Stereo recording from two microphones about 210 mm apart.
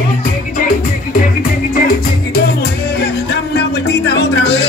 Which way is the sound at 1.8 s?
45° left (ahead or behind).